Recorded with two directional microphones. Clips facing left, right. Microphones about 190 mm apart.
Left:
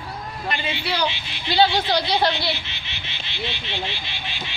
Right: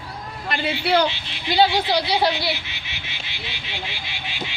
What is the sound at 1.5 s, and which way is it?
Speech, 10° right (ahead or behind).